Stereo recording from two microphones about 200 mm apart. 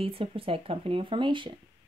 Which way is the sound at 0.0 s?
25° right (ahead or behind).